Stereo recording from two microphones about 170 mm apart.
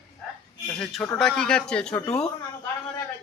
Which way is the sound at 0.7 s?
5° left (ahead or behind).